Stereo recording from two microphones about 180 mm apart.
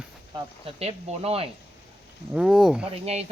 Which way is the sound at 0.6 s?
35° right (ahead or behind).